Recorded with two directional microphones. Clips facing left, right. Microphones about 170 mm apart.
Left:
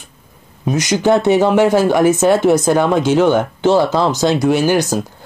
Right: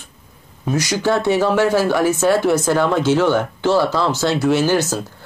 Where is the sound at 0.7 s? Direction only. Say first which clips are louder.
Left 4 dB; 20° left (ahead or behind).